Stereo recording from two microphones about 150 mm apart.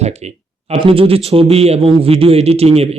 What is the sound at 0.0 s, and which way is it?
Speech, 45° right (ahead or behind).